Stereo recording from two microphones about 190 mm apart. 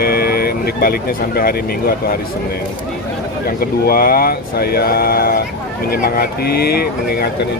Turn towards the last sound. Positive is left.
turn(degrees=55)  # may be behind; listen again after turning